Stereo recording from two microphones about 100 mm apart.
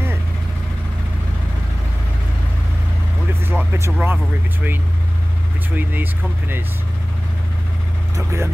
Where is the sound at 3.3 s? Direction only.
25° right (ahead or behind).